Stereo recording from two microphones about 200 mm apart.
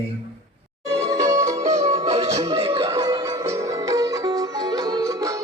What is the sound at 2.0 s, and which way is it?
Music, 30° right (ahead or behind).